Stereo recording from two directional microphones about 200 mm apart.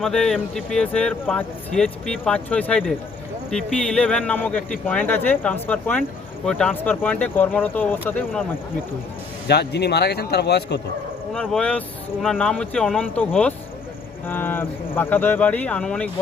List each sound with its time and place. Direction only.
0.0 s speech: centre (ahead or behind)
9.5 s speech: 55° left (ahead or behind)
11.3 s speech: 5° left (ahead or behind)